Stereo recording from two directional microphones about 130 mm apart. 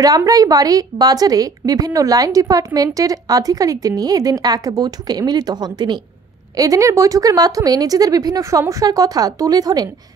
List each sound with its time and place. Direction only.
0.0 s a woman's voice: 25° right (ahead or behind)